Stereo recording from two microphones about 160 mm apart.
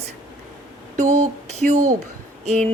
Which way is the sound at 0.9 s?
45° right (ahead or behind).